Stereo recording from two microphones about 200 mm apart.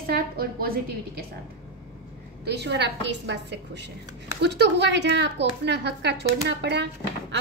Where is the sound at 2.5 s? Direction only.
55° right (ahead or behind).